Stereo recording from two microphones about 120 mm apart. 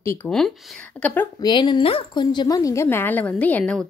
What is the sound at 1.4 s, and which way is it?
A woman's voice, 40° left (ahead or behind).